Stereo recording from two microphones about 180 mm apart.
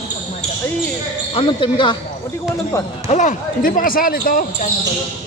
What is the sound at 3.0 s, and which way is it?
Speech, 40° left (ahead or behind).